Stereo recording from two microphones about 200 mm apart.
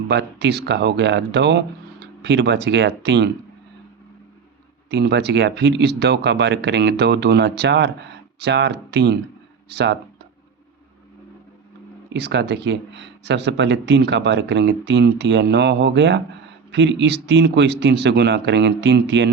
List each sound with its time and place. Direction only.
0.1 s speech: 60° right (ahead or behind)
4.9 s speech: 55° right (ahead or behind)
12.1 s speech: 55° right (ahead or behind)